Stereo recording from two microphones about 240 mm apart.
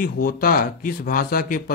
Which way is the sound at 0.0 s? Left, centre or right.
Left.